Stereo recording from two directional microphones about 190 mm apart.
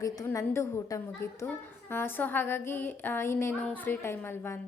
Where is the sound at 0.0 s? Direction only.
20° left (ahead or behind).